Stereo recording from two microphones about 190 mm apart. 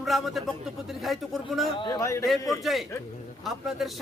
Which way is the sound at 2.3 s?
Centre (ahead or behind).